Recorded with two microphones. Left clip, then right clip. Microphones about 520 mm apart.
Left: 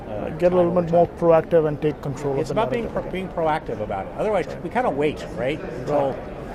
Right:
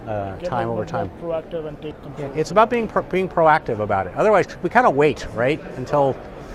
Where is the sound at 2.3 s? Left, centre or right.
Right.